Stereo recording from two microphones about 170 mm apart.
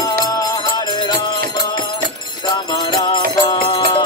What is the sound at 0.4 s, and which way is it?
Music, 20° left (ahead or behind).